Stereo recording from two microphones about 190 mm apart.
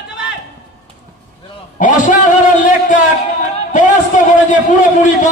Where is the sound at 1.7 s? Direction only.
40° left (ahead or behind).